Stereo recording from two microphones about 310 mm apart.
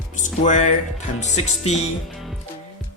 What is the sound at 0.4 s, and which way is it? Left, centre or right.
Speech, left.